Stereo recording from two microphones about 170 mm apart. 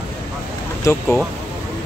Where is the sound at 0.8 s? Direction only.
20° left (ahead or behind).